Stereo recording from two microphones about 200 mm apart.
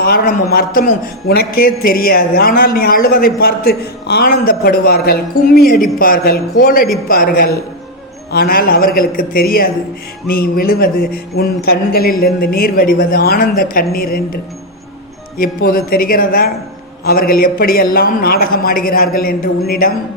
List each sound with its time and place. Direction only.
0.0 s a man's voice: 50° left (ahead or behind)
15.4 s a man's voice: 45° left (ahead or behind)